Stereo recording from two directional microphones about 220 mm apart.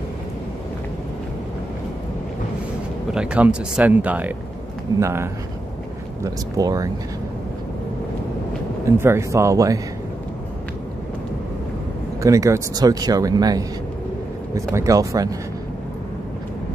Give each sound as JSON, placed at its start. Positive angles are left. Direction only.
{"t": 3.1, "sound": "speech", "side_deg": -5}
{"t": 8.9, "sound": "speech", "side_deg": -10}
{"t": 12.2, "sound": "speech", "side_deg": -15}